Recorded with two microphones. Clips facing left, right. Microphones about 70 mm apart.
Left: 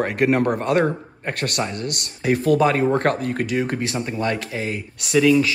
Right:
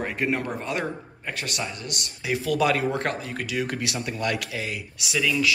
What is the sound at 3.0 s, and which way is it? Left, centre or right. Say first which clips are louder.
Speech: left 8 dB; left.